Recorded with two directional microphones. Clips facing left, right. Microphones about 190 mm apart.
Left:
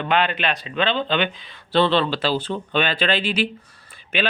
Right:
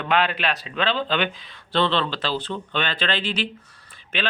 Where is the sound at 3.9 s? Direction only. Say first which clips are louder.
Left 5 dB; 10° left (ahead or behind).